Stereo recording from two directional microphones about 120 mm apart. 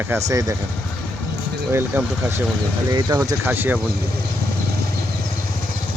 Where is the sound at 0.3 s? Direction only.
30° right (ahead or behind).